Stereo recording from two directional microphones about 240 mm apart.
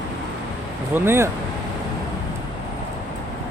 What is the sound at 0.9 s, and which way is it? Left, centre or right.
Speech, centre.